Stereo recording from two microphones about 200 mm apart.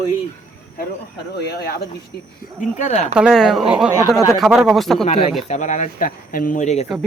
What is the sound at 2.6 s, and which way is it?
Speech, 35° left (ahead or behind).